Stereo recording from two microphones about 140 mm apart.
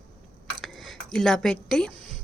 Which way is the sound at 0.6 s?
5° left (ahead or behind).